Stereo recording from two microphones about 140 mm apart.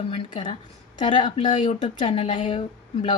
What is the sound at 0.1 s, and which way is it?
A woman's voice, 35° left (ahead or behind).